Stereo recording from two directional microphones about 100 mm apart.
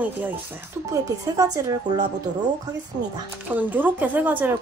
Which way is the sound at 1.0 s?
35° right (ahead or behind).